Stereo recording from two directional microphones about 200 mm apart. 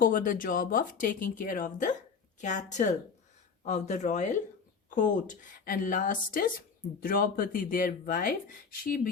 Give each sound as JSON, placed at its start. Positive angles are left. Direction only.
{"t": 0.0, "sound": "speech", "side_deg": 45}